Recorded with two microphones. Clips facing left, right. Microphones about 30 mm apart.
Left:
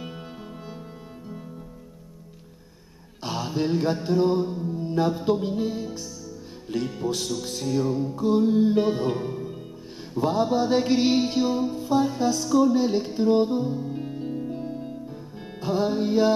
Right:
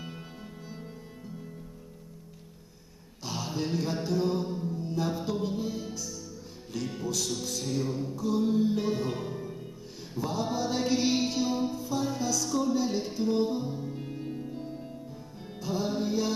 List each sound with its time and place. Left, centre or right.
3.3 s mantra: left
4.6 s music: left
7.0 s mantra: left
7.9 s music: centre
8.2 s music: left
10.1 s mantra: left
11.7 s music: left
12.1 s mantra: left
12.4 s music: centre
12.7 s music: left; by 14.9 s centre
15.6 s mantra: left